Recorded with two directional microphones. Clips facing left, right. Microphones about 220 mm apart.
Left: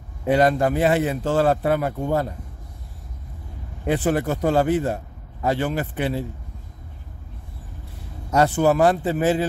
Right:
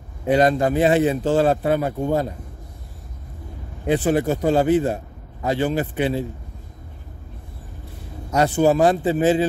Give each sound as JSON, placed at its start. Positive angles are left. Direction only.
{"t": 0.4, "sound": "speech", "side_deg": -20}
{"t": 3.9, "sound": "speech", "side_deg": -20}
{"t": 8.3, "sound": "speech", "side_deg": -20}